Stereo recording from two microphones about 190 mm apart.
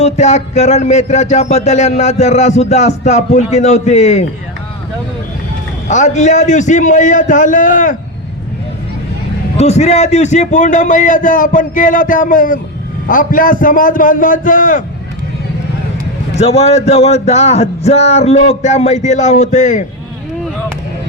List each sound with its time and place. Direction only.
0.0 s speech: 35° left (ahead or behind)
5.9 s speech: 40° left (ahead or behind)
9.6 s a man's voice: 35° left (ahead or behind)
16.4 s speech: 35° left (ahead or behind)